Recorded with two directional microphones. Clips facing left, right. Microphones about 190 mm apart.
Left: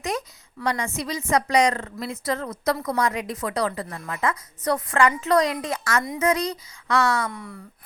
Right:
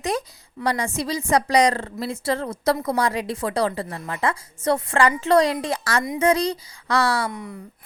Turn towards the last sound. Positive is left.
turn(degrees=-15)  # may be behind; listen again after turning